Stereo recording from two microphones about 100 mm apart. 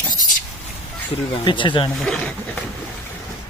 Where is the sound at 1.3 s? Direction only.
55° left (ahead or behind).